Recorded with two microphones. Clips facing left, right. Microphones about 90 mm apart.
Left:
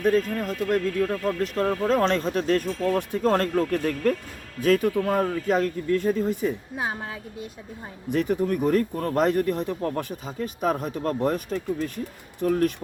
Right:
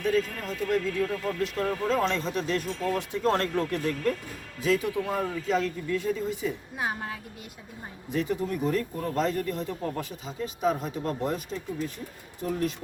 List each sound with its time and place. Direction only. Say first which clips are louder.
0.0 s speech: left 5 dB; 45° left (ahead or behind)
8.1 s speech: left 5 dB; 60° left (ahead or behind)